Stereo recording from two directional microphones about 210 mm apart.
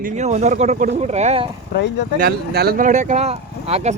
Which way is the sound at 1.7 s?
55° left (ahead or behind).